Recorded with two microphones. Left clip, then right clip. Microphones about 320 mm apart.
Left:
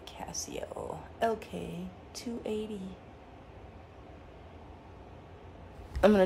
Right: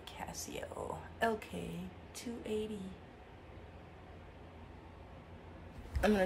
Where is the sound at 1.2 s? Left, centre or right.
Centre.